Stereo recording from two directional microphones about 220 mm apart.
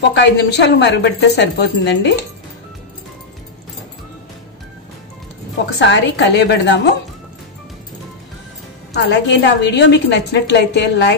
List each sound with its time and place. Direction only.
0.1 s a woman's voice: 50° left (ahead or behind)
5.8 s a woman's voice: 50° left (ahead or behind)
8.9 s a woman's voice: 50° left (ahead or behind)